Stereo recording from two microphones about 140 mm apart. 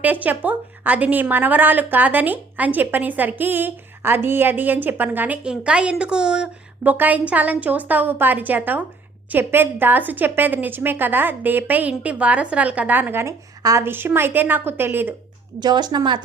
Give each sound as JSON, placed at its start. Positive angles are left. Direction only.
{"t": 0.0, "sound": "a woman's voice", "side_deg": -10}
{"t": 15.6, "sound": "a woman's voice", "side_deg": -30}